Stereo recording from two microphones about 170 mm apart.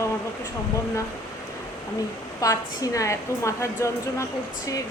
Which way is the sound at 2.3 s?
20° left (ahead or behind).